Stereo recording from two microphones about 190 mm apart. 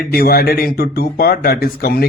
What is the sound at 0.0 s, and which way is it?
Speech, 55° left (ahead or behind).